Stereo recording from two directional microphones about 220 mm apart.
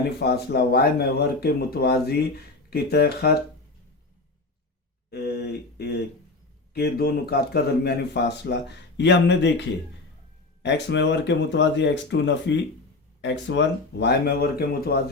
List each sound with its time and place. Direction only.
0.2 s speech: 45° left (ahead or behind)
5.1 s speech: 45° left (ahead or behind)